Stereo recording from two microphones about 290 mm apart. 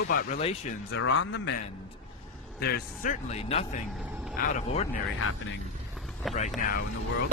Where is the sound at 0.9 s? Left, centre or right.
Left.